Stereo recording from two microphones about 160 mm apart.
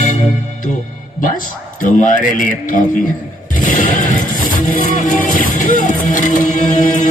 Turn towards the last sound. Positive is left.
turn(degrees=55)  # may be behind; listen again after turning